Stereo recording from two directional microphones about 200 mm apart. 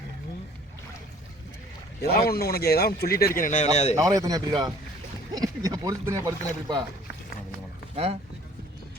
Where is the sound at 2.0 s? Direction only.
50° left (ahead or behind); by 3.9 s 35° left (ahead or behind).